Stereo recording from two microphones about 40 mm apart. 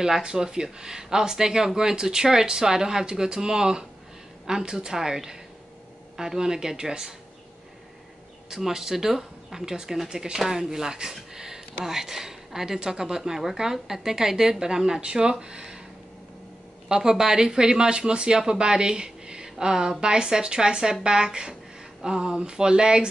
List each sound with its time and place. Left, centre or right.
0.0 s speech: centre
8.5 s speech: centre
16.9 s speech: centre